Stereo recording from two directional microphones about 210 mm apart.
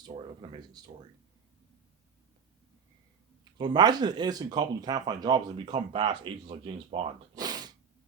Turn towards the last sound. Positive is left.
turn(degrees=-20)  # may be behind; listen again after turning